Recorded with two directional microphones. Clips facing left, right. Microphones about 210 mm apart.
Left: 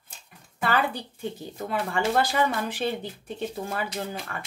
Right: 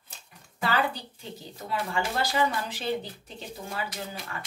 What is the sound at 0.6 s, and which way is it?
A woman's voice, 55° left (ahead or behind).